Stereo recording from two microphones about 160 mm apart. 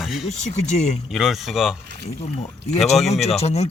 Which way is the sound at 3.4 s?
40° left (ahead or behind).